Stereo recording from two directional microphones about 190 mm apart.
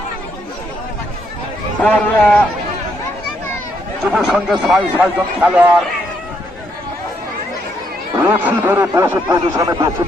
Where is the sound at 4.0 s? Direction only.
Centre (ahead or behind).